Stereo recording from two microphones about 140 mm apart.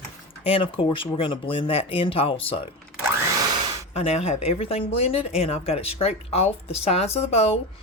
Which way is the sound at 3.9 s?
45° left (ahead or behind).